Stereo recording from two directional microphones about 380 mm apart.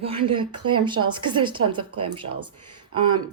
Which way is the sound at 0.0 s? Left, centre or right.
Centre.